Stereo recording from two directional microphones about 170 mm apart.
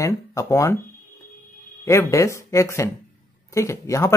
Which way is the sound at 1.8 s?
15° left (ahead or behind).